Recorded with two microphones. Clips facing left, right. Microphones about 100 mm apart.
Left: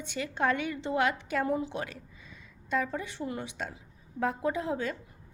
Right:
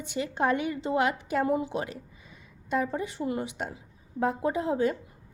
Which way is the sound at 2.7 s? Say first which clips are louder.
Right 3 dB; 30° right (ahead or behind).